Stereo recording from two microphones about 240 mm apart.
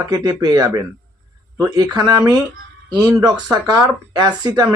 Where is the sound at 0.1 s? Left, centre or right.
Centre.